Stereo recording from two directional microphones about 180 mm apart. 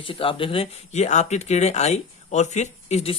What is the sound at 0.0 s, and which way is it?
Speech, 30° left (ahead or behind).